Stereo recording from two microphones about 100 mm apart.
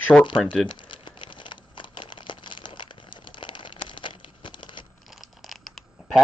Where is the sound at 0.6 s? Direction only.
55° left (ahead or behind).